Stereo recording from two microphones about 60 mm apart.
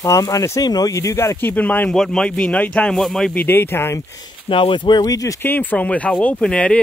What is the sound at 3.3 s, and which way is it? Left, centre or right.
Speech, left.